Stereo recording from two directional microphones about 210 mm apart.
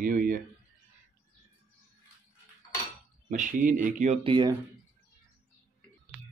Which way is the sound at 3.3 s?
40° right (ahead or behind).